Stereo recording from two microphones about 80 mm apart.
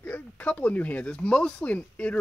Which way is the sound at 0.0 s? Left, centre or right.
Left.